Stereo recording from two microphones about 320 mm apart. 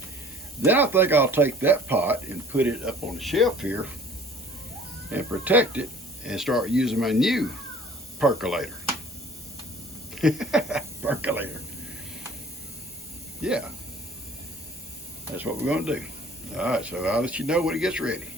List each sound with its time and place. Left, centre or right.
0.6 s speech: centre
5.1 s speech: centre
10.2 s speech: centre
13.4 s speech: centre
15.4 s speech: centre